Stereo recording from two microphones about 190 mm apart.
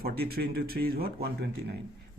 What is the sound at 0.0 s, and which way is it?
A man's voice, 55° right (ahead or behind).